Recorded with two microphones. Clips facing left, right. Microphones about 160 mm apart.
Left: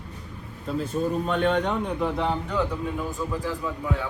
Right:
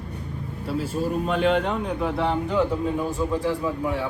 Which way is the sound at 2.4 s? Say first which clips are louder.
Right 4 dB; 20° right (ahead or behind).